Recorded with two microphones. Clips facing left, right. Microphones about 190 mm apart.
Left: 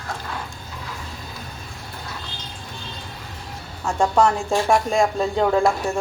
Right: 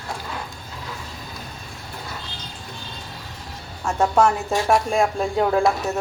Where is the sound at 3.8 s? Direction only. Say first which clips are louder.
Even; centre (ahead or behind).